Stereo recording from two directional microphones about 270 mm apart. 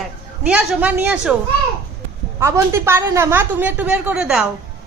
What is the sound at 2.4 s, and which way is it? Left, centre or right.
A woman's voice, centre.